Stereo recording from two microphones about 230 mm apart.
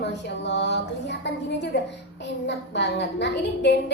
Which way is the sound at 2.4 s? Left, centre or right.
Left.